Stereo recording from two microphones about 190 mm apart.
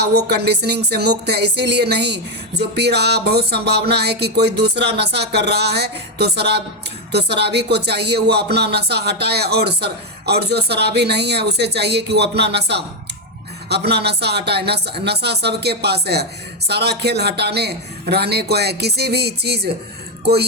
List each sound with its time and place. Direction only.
0.0 s speech: 60° right (ahead or behind)